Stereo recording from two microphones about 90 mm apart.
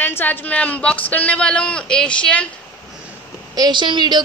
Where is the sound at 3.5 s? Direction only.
50° right (ahead or behind).